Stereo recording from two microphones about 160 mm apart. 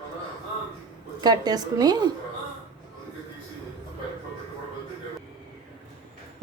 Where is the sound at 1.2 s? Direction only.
25° right (ahead or behind).